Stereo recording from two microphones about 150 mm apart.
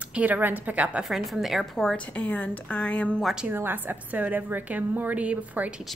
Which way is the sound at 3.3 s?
10° right (ahead or behind).